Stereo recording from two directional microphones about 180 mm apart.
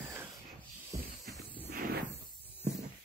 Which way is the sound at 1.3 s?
10° left (ahead or behind).